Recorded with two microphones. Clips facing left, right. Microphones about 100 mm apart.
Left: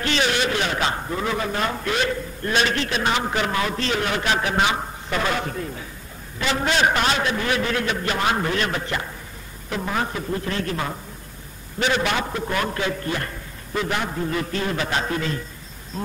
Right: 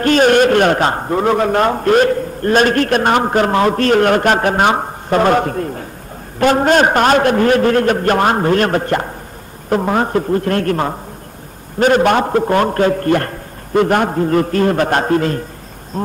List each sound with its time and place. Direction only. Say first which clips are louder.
0.0 s a man's voice: right 12 dB; 45° right (ahead or behind)